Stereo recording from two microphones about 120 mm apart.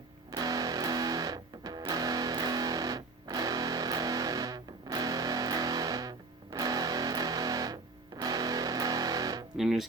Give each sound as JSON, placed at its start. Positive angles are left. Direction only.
{"t": 0.3, "sound": "music", "side_deg": -30}
{"t": 9.6, "sound": "speech", "side_deg": 0}